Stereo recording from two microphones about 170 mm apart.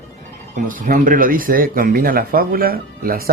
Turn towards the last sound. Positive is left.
turn(degrees=-60)  # may be behind; listen again after turning